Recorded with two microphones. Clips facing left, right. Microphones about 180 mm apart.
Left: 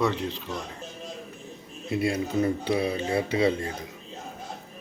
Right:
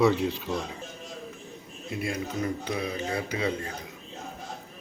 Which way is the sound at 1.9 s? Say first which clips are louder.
Left 6 dB; 30° left (ahead or behind).